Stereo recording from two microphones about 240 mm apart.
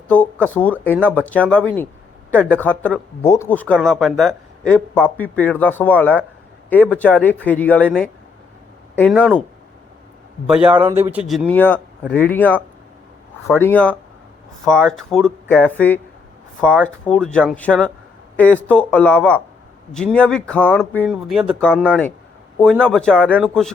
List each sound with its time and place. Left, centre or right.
0.1 s speech: centre
10.4 s speech: centre